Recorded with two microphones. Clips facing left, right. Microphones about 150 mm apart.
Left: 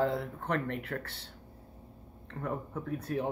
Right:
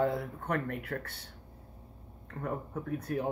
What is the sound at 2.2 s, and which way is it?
Speech, 45° right (ahead or behind).